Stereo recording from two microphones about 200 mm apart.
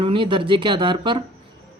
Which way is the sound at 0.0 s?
25° right (ahead or behind).